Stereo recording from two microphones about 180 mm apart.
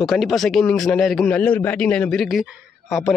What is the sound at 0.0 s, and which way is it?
A man's voice, centre (ahead or behind).